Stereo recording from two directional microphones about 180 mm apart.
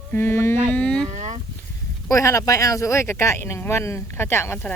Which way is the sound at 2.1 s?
15° left (ahead or behind).